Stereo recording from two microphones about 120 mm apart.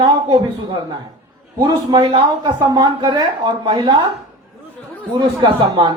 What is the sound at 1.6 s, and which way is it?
Speech, 35° right (ahead or behind).